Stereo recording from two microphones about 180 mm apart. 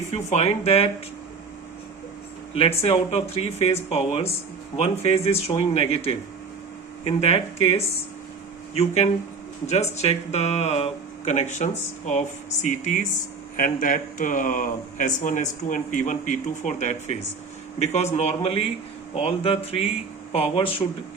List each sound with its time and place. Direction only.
0.1 s speech: 40° left (ahead or behind)
2.6 s speech: 30° left (ahead or behind)